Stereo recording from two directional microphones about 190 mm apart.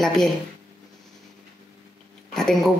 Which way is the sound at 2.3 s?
Centre (ahead or behind).